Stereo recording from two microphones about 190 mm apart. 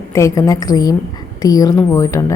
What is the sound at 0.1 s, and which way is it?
A woman's voice, 15° left (ahead or behind).